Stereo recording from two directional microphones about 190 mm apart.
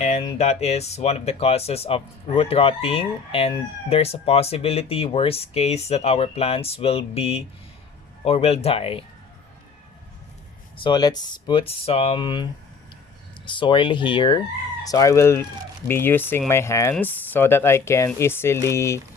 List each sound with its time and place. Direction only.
0.0 s speech: 35° left (ahead or behind)
10.8 s speech: 20° left (ahead or behind)